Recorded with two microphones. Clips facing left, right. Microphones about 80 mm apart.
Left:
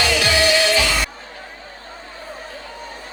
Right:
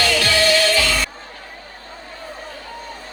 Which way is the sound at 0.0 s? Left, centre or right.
Centre.